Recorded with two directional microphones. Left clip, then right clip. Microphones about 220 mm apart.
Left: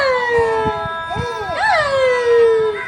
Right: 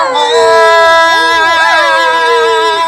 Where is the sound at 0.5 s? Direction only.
45° right (ahead or behind).